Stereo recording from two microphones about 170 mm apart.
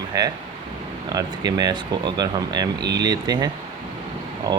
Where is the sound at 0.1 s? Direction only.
20° right (ahead or behind).